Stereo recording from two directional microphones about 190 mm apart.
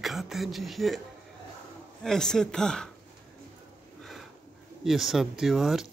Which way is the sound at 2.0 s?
5° left (ahead or behind).